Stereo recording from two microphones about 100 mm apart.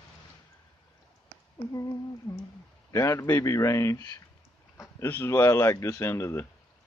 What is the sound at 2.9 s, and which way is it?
Speech, 35° left (ahead or behind).